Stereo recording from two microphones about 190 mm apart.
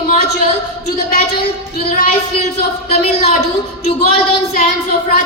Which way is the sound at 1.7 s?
50° left (ahead or behind).